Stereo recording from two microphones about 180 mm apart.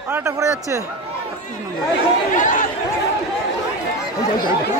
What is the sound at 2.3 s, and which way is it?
Speech, 45° left (ahead or behind).